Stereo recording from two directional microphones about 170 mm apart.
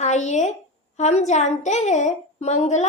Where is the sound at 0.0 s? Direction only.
45° left (ahead or behind).